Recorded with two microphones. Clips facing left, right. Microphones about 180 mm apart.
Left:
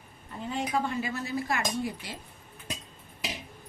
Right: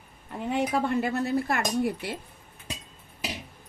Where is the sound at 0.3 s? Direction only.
65° right (ahead or behind).